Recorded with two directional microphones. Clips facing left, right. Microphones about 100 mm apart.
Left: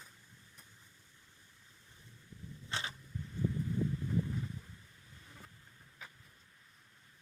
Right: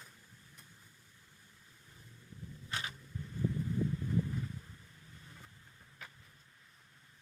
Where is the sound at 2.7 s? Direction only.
25° left (ahead or behind).